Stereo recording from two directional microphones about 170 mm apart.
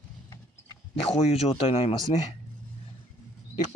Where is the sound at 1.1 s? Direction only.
35° left (ahead or behind).